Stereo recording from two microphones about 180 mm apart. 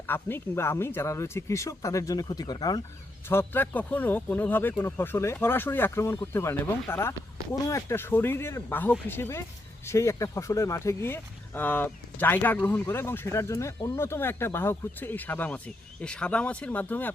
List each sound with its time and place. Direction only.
0.1 s speech: 10° left (ahead or behind)
3.2 s speech: 10° left (ahead or behind)